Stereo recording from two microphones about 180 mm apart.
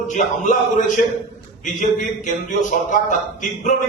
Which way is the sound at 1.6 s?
45° left (ahead or behind).